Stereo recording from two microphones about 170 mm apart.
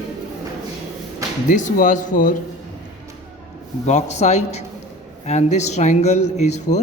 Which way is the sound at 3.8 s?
40° left (ahead or behind).